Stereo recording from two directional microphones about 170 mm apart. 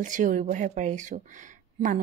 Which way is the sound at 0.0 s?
50° right (ahead or behind).